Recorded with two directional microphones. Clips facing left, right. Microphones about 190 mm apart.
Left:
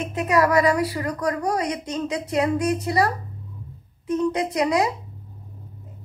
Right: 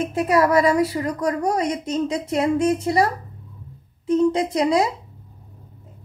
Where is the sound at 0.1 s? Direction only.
30° right (ahead or behind).